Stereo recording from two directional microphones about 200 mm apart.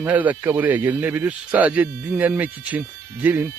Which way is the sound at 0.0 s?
10° right (ahead or behind).